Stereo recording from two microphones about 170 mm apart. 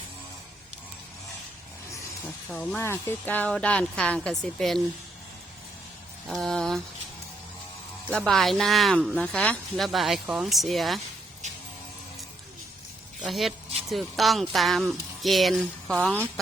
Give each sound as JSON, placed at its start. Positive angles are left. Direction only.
{"t": 2.2, "sound": "speech", "side_deg": 10}
{"t": 6.2, "sound": "speech", "side_deg": 0}
{"t": 8.1, "sound": "speech", "side_deg": 0}
{"t": 11.4, "sound": "music", "side_deg": -45}
{"t": 13.2, "sound": "speech", "side_deg": 0}